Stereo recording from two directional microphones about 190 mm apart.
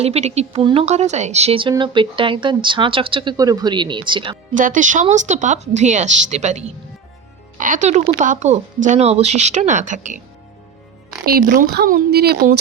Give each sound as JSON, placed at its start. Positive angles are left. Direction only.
{"t": 0.0, "sound": "speech", "side_deg": -35}
{"t": 4.5, "sound": "speech", "side_deg": -45}
{"t": 11.3, "sound": "speech", "side_deg": -50}